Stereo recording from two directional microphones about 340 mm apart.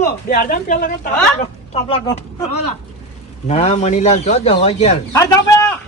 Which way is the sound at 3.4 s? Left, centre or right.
Centre.